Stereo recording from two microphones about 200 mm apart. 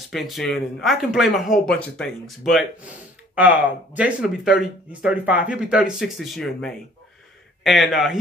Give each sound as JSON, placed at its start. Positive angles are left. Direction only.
{"t": 0.1, "sound": "speech", "side_deg": 0}
{"t": 3.3, "sound": "speech", "side_deg": -5}